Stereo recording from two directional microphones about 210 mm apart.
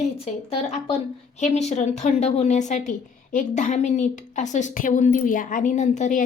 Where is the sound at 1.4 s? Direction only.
35° left (ahead or behind).